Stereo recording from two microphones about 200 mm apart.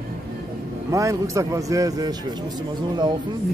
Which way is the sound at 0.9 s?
15° right (ahead or behind).